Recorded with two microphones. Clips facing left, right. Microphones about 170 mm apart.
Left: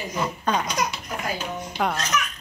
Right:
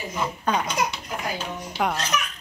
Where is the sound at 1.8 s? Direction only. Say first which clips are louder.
Even; 5° right (ahead or behind).